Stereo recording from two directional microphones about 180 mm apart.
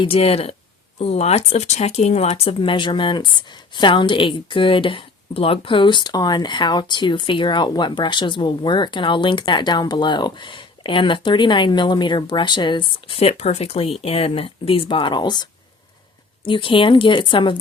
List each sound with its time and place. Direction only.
0.0 s speech: 30° left (ahead or behind)